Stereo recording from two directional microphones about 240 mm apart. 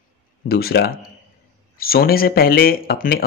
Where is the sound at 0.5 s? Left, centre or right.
Left.